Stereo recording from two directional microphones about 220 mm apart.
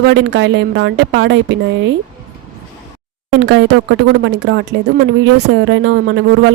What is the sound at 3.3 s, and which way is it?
Speech, 55° right (ahead or behind).